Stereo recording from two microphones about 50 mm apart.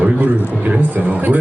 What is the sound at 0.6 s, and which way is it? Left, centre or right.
Speech, right.